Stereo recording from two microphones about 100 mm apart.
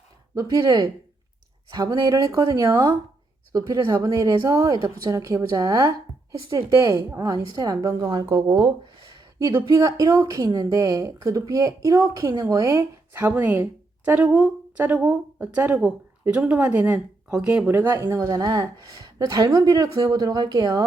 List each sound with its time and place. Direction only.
0.3 s a woman's voice: 35° right (ahead or behind)
7.3 s a woman's voice: 40° right (ahead or behind)
9.6 s a woman's voice: 30° right (ahead or behind); by 17.7 s 10° right (ahead or behind)
17.7 s a woman's voice: 25° right (ahead or behind); by 20.8 s 40° right (ahead or behind)